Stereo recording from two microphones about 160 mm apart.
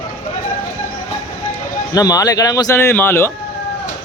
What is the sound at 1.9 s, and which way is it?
Speech, 20° left (ahead or behind).